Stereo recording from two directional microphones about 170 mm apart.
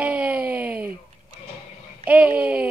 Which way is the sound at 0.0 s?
10° right (ahead or behind).